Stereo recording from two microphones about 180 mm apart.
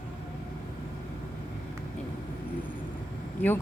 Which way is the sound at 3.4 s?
10° left (ahead or behind).